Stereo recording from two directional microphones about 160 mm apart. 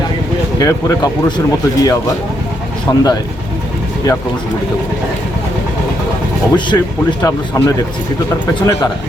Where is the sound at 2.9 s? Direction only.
20° left (ahead or behind).